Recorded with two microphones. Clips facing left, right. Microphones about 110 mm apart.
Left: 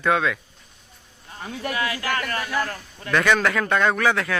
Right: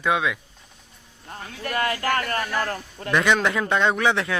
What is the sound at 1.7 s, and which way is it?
A man's voice, 45° right (ahead or behind).